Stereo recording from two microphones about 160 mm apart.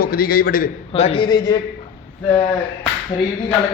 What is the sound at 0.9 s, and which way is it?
Speech, 35° left (ahead or behind).